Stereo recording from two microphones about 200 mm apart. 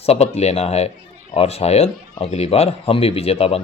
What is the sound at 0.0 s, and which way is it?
Speech, 30° left (ahead or behind).